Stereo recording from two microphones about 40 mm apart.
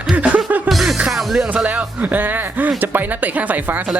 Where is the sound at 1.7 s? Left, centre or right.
Right.